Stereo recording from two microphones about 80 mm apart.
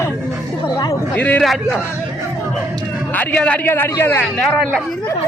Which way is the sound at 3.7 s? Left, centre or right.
Left.